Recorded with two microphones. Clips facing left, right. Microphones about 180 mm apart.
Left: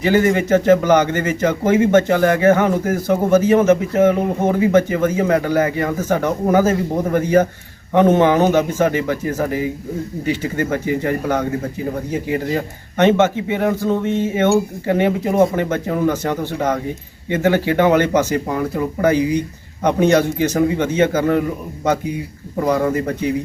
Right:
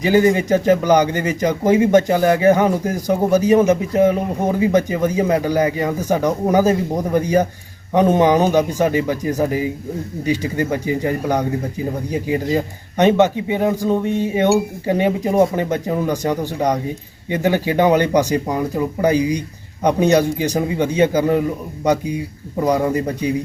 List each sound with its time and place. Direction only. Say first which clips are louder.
0.0 s a man's voice: right 1 dB; 15° right (ahead or behind)
22.6 s a man's voice: even; 15° right (ahead or behind)